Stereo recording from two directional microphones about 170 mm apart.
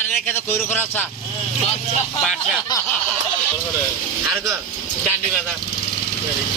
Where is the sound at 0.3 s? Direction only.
10° left (ahead or behind).